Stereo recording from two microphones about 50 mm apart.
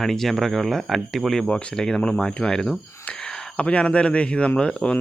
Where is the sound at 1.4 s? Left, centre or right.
Centre.